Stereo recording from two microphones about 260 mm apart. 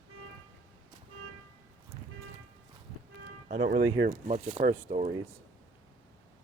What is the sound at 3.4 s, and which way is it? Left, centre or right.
Speech, right.